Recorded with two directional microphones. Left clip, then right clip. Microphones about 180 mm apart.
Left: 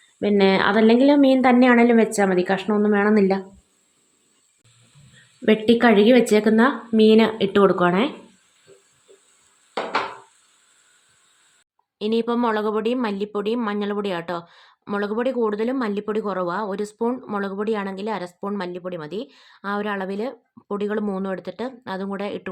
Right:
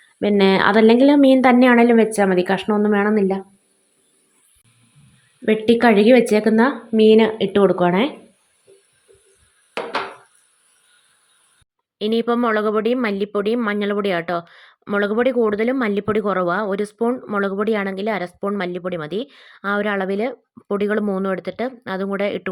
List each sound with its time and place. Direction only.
0.2 s a woman's voice: 15° right (ahead or behind)
5.5 s a woman's voice: 10° right (ahead or behind)
11.9 s a woman's voice: 10° right (ahead or behind)